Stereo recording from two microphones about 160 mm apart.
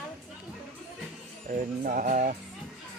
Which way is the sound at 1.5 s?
60° right (ahead or behind).